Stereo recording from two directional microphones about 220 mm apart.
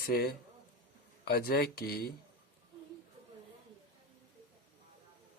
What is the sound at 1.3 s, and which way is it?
Speech, 45° left (ahead or behind).